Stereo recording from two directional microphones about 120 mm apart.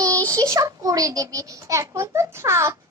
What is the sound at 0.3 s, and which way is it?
A child's voice, 25° right (ahead or behind).